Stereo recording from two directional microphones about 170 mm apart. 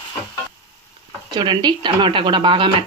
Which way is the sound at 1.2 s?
25° right (ahead or behind).